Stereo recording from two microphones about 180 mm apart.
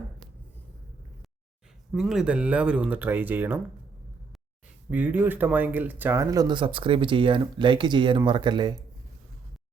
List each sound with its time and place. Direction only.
1.9 s speech: centre (ahead or behind)
4.9 s speech: 10° right (ahead or behind)